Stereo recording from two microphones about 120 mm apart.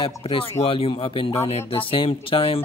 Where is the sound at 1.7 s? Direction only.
45° left (ahead or behind).